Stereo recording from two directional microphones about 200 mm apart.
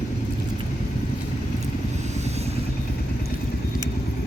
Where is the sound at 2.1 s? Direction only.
35° right (ahead or behind).